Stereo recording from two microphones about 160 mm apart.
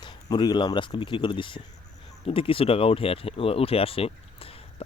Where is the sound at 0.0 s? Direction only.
30° left (ahead or behind).